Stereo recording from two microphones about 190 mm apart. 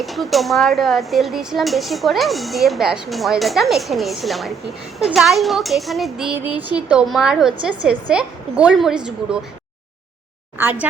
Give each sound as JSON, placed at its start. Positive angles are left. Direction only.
{"t": 0.0, "sound": "speech", "side_deg": 0}
{"t": 10.6, "sound": "speech", "side_deg": -10}